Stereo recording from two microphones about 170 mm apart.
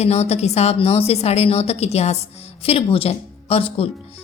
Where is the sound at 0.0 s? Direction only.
40° left (ahead or behind).